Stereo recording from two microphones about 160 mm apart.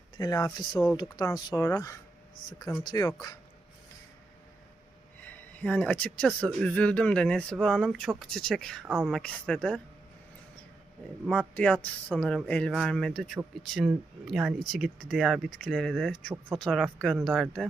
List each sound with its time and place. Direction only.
0.2 s speech: 25° left (ahead or behind)
5.2 s speech: 10° left (ahead or behind)
8.9 s speech: 10° right (ahead or behind)
9.1 s speech: 5° left (ahead or behind)
11.3 s speech: 10° left (ahead or behind)